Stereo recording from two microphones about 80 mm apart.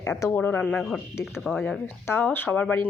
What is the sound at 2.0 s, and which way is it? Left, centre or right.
Speech, left.